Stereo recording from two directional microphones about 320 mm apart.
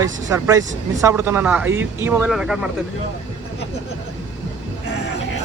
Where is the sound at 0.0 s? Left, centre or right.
Centre.